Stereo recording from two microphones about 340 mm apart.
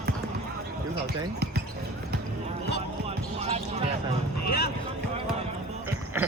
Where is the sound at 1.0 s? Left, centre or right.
Right.